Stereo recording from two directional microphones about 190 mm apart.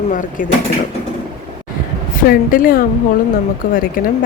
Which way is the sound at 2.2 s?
50° left (ahead or behind).